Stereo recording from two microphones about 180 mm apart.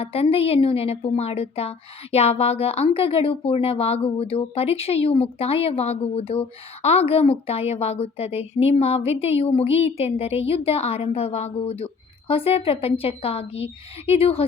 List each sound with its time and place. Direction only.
0.0 s speech: 35° left (ahead or behind)